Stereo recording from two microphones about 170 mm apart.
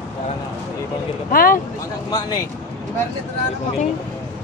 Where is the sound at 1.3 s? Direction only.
60° left (ahead or behind).